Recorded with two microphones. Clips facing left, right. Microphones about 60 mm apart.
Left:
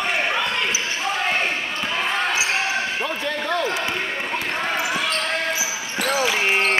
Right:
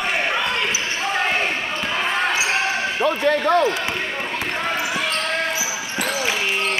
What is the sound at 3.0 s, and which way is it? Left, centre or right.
Basketball bounce, right.